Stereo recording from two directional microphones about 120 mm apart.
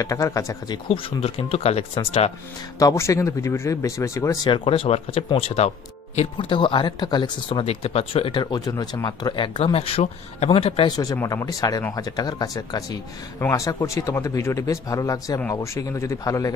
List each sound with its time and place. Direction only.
0.0 s speech: 25° left (ahead or behind)
0.7 s speech: 45° left (ahead or behind)
2.8 s speech: 25° left (ahead or behind)
4.5 s speech: 45° left (ahead or behind)
6.3 s speech: 45° left (ahead or behind)
7.6 s speech: 55° left (ahead or behind)
8.5 s speech: 30° left (ahead or behind); by 10.9 s 55° left (ahead or behind)
10.9 s speech: 30° left (ahead or behind)